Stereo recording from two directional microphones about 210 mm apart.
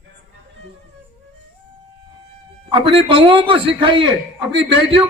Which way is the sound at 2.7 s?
25° right (ahead or behind).